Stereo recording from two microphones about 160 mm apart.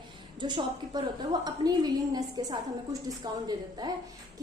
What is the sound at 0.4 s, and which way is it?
A woman's voice, 30° right (ahead or behind).